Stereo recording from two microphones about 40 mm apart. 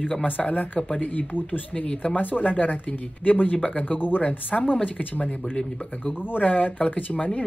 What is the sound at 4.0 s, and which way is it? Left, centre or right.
Speech, left.